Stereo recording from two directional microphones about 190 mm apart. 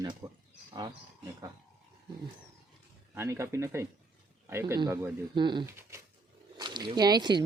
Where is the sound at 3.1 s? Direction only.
15° right (ahead or behind).